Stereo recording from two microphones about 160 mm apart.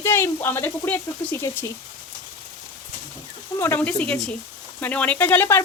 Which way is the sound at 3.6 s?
15° left (ahead or behind).